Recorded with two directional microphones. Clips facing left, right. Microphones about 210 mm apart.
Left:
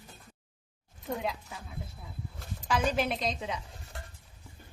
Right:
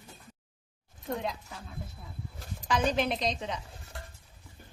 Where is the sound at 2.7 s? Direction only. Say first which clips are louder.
Right 1 dB; 5° left (ahead or behind).